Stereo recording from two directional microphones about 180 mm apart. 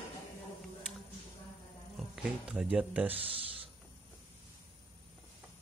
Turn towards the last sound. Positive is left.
turn(degrees=-30)  # may be behind; listen again after turning